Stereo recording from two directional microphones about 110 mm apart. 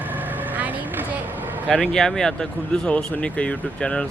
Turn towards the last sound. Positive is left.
turn(degrees=10)  # may be behind; listen again after turning